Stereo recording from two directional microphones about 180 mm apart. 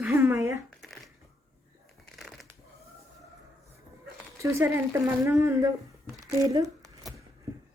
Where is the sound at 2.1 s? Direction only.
Centre (ahead or behind).